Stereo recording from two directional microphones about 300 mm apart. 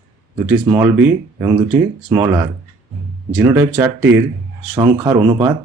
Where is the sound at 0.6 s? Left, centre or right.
Centre.